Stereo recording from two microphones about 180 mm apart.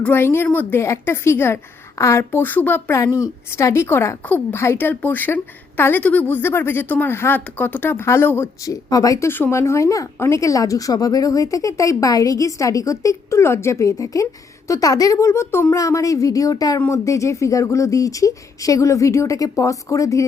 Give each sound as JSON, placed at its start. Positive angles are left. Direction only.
{"t": 0.0, "sound": "a woman's voice", "side_deg": 10}